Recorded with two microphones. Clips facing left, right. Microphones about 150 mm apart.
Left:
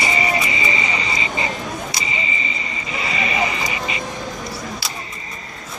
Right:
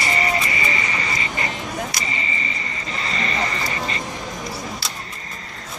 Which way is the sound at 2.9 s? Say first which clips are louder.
Left 3 dB; 10° left (ahead or behind).